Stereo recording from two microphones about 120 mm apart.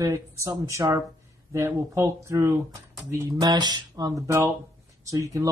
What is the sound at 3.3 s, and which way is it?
Speech, 35° right (ahead or behind).